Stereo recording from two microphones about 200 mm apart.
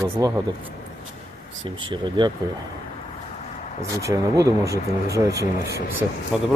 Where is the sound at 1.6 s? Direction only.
25° right (ahead or behind).